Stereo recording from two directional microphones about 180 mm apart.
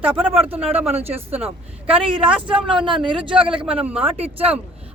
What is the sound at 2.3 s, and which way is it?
Speech, 5° right (ahead or behind).